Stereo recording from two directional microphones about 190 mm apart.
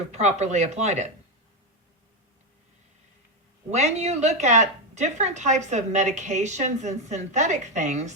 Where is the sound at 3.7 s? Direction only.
35° right (ahead or behind).